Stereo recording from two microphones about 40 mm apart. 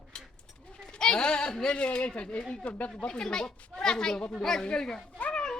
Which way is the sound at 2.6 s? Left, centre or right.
Left.